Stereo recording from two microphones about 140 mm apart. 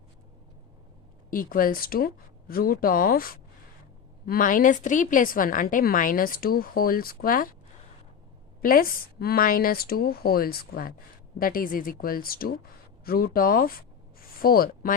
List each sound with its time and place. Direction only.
1.3 s a woman's voice: 90° left
4.3 s a woman's voice: 80° left
8.6 s a woman's voice: 90° left